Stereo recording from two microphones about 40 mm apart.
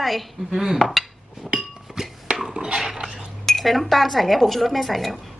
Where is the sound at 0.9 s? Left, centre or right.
Centre.